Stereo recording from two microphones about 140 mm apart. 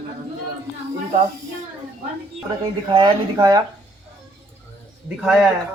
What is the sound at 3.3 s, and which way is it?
Speech, 25° right (ahead or behind).